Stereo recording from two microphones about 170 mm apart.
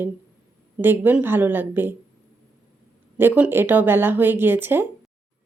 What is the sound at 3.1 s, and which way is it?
A woman's voice, 10° right (ahead or behind).